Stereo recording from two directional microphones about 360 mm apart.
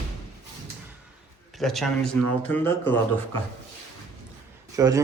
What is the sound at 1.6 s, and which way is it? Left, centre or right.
Speech, centre.